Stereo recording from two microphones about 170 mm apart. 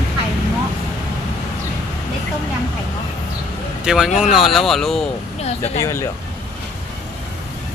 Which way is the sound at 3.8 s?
5° right (ahead or behind).